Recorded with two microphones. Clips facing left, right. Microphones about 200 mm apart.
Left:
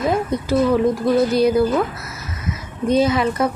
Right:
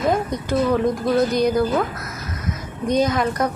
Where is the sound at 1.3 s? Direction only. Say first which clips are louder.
Left 3 dB; 5° left (ahead or behind).